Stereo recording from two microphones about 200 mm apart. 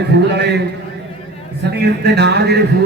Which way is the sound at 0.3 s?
55° right (ahead or behind).